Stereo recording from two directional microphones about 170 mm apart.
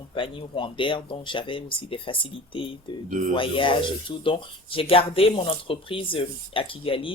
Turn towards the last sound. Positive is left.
turn(degrees=30)  # may be behind; listen again after turning